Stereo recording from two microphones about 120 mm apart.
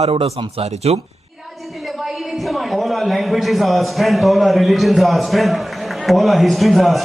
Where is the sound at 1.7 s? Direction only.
Centre (ahead or behind).